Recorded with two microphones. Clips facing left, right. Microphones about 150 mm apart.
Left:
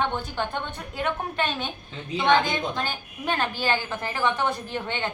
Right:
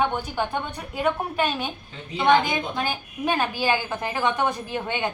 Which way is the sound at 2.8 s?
15° right (ahead or behind).